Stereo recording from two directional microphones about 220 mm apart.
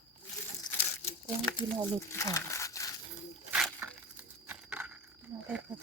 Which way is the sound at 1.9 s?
15° left (ahead or behind).